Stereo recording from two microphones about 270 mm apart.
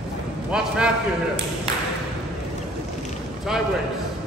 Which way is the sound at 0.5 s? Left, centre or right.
Centre.